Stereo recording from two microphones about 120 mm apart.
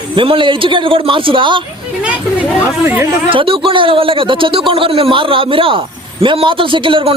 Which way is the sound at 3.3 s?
45° right (ahead or behind).